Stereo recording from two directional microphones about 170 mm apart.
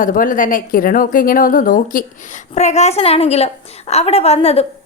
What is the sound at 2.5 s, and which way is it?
A woman's voice, 40° left (ahead or behind).